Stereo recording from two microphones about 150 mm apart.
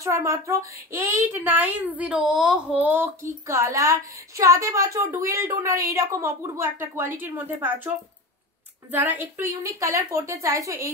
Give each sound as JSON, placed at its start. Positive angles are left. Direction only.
{"t": 0.0, "sound": "a woman's voice", "side_deg": -20}
{"t": 8.9, "sound": "a woman's voice", "side_deg": -10}